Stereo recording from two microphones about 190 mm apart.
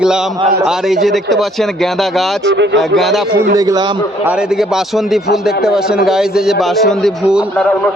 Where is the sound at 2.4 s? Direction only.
70° right (ahead or behind).